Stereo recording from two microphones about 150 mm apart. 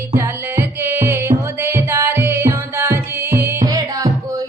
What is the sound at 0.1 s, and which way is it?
Music, 15° right (ahead or behind).